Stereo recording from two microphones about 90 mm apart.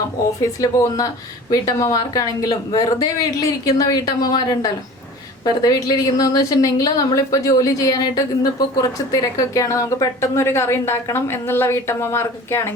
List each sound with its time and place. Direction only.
0.6 s a woman's voice: 40° left (ahead or behind)